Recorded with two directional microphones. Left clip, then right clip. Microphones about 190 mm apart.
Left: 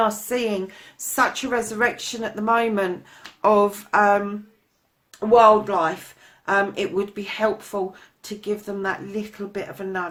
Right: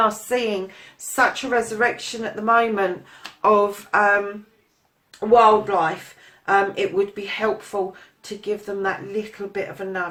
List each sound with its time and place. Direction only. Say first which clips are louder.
0.0 s a woman's voice: right 2 dB; 35° left (ahead or behind)
5.3 s a woman's voice: even; 45° left (ahead or behind)